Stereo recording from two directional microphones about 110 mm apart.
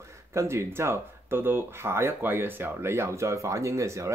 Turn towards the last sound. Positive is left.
turn(degrees=-25)  # may be behind; listen again after turning